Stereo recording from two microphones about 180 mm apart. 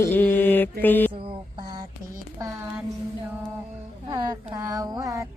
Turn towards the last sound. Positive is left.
turn(degrees=-20)  # may be behind; listen again after turning